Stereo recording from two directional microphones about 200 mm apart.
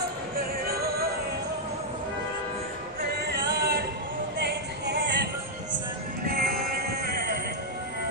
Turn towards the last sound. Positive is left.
turn(degrees=-45)  # may be behind; listen again after turning